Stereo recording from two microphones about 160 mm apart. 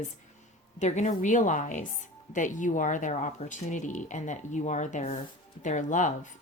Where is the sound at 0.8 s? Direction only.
45° left (ahead or behind).